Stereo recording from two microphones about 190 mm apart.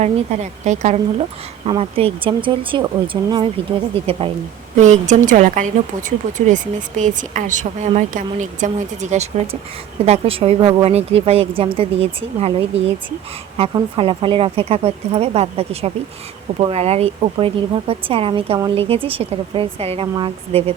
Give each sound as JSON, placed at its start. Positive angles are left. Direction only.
{"t": 0.0, "sound": "speech", "side_deg": -35}